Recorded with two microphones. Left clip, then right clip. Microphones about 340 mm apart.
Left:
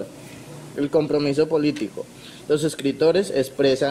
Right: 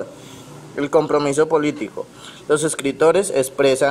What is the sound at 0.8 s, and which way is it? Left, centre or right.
Speech, right.